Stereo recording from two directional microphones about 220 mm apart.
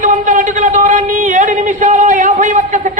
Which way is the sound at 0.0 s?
35° right (ahead or behind).